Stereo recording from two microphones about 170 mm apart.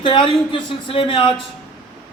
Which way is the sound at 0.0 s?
30° left (ahead or behind).